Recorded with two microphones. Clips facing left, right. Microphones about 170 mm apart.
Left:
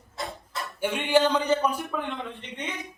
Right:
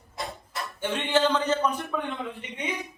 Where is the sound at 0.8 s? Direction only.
10° left (ahead or behind); by 2.6 s 5° right (ahead or behind).